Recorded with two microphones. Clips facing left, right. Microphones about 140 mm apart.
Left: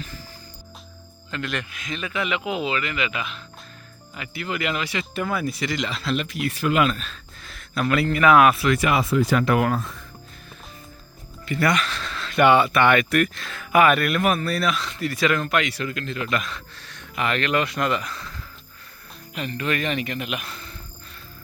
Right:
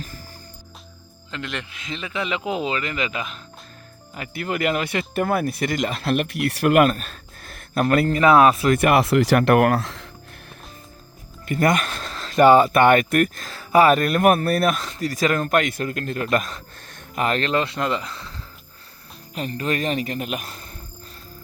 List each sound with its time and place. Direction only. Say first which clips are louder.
1.3 s speech: left 2 dB; 20° right (ahead or behind); by 10.1 s 85° right
11.4 s speech: right 2 dB; 45° right (ahead or behind)
14.3 s speech: right 9 dB; 55° right (ahead or behind); by 18.3 s 25° right (ahead or behind)
19.3 s speech: right 1 dB; 40° right (ahead or behind)